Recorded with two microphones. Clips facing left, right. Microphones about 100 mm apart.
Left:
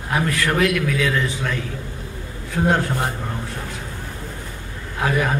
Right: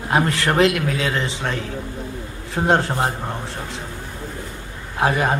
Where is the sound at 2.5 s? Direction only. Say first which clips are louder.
Right 1 dB; 30° right (ahead or behind).